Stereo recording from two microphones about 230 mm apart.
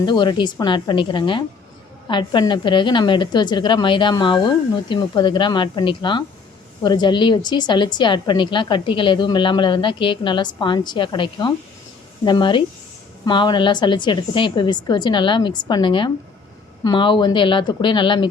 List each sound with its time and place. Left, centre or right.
0.0 s a woman's voice: centre